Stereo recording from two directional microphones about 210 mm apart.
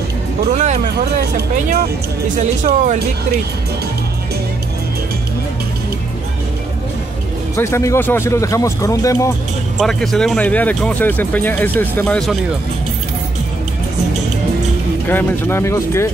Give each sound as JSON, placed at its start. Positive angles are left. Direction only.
{"t": 0.5, "sound": "speech", "side_deg": -35}
{"t": 2.4, "sound": "speech", "side_deg": -35}
{"t": 7.5, "sound": "speech", "side_deg": 15}
{"t": 9.8, "sound": "speech", "side_deg": 0}
{"t": 15.0, "sound": "speech", "side_deg": 10}